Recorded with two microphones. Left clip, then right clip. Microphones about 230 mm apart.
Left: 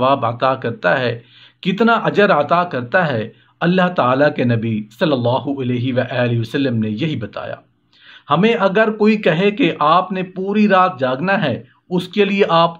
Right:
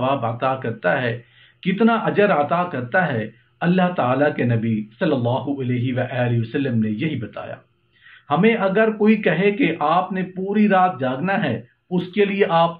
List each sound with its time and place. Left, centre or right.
0.0 s speech: left